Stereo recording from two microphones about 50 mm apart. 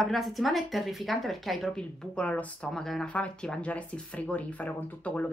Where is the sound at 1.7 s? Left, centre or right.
Centre.